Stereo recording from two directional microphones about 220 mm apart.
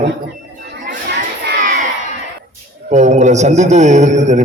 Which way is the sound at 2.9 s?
30° right (ahead or behind).